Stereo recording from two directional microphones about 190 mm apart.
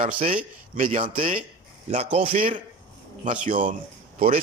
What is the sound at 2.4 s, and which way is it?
A man's voice, 45° right (ahead or behind).